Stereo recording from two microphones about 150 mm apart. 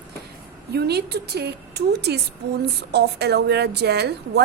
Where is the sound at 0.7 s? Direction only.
90° right.